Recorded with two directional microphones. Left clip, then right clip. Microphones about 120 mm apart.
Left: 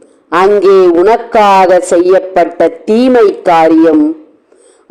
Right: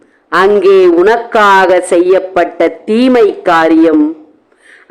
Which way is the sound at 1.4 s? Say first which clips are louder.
Left 1 dB; 10° right (ahead or behind).